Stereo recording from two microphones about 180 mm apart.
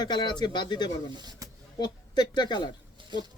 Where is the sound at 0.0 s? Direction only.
25° left (ahead or behind).